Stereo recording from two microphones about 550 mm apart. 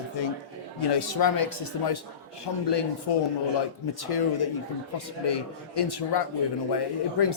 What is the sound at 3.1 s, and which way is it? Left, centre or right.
Speech, left.